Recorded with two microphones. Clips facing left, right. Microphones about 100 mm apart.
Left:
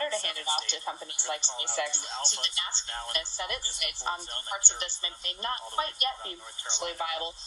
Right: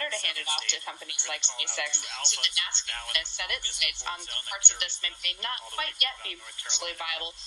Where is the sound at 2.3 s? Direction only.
20° left (ahead or behind).